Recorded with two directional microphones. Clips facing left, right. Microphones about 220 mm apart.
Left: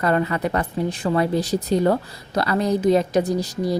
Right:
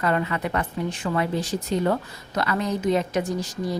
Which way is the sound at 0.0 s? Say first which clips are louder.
Left 4 dB; 40° left (ahead or behind).